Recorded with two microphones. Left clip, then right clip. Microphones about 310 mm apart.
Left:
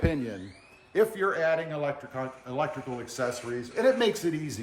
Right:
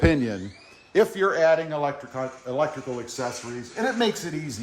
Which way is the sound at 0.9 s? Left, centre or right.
Right.